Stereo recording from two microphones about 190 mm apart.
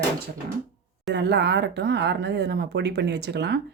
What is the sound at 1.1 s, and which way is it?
Speech, 65° right (ahead or behind).